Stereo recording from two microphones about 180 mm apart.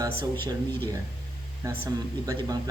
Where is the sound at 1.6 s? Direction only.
15° right (ahead or behind).